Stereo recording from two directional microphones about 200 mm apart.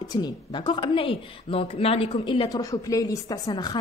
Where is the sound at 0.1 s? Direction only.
20° left (ahead or behind).